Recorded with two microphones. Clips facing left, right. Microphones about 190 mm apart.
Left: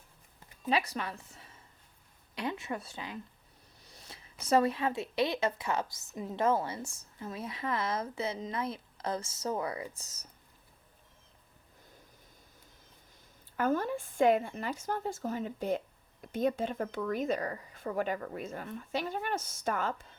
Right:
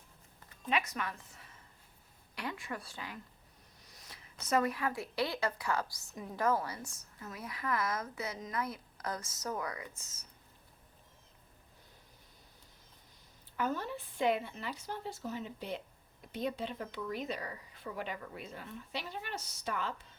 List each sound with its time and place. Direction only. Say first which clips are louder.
0.7 s a woman's voice: left 3 dB; 35° left (ahead or behind)
3.9 s a sound: left 4 dB; 30° left (ahead or behind)
4.4 s a woman's voice: left 4 dB; 30° left (ahead or behind)
13.6 s a woman's voice: left 6 dB; 50° left (ahead or behind)